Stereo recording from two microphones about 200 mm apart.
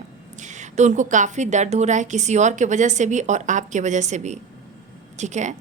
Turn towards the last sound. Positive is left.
turn(degrees=-35)  # may be behind; listen again after turning